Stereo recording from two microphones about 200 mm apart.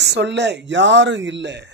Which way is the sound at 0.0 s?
60° right (ahead or behind).